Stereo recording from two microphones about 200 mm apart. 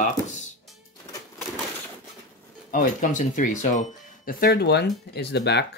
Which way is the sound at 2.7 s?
40° left (ahead or behind).